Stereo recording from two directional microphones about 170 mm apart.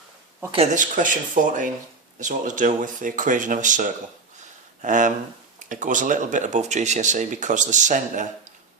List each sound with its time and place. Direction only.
0.5 s speech: 40° right (ahead or behind)